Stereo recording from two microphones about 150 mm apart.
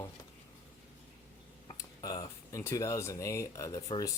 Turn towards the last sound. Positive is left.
turn(degrees=25)  # may be behind; listen again after turning